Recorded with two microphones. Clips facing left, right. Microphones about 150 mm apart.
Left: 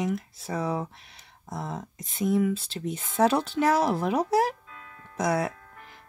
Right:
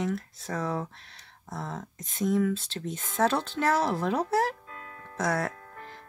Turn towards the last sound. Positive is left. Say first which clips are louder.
# left 3 dB
turn(degrees=15)  # may be behind; listen again after turning